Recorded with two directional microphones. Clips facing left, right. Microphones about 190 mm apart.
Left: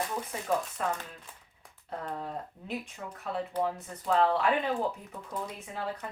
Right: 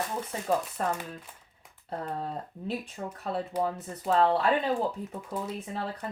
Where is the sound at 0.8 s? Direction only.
40° right (ahead or behind).